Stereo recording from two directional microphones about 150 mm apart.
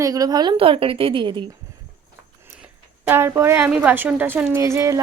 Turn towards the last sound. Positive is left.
turn(degrees=-20)  # may be behind; listen again after turning